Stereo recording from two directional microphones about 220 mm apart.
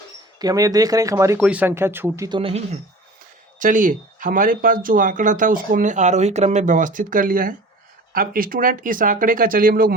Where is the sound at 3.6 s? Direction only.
35° right (ahead or behind).